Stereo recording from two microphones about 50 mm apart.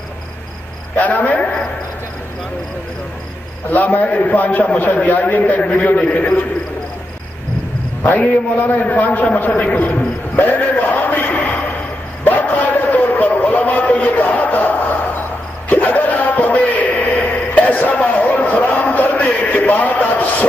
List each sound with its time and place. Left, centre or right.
0.9 s a man's voice: left
3.7 s a man's voice: left
8.0 s a man's voice: left
9.8 s a sound: left